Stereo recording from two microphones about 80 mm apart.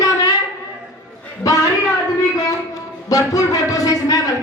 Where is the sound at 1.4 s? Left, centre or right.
Left.